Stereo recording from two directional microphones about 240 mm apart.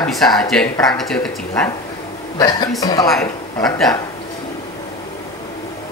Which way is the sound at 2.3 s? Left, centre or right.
Centre.